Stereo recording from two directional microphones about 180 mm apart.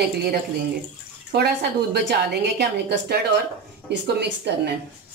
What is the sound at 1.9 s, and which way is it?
A woman's voice, 65° right (ahead or behind).